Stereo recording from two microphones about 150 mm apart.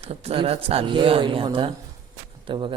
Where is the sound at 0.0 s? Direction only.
40° right (ahead or behind).